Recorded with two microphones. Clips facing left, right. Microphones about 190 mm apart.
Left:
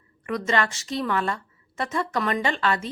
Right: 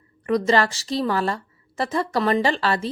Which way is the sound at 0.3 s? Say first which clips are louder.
Right 5 dB; 35° right (ahead or behind).